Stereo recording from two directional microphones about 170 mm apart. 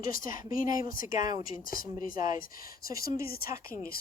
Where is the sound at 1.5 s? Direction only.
55° left (ahead or behind).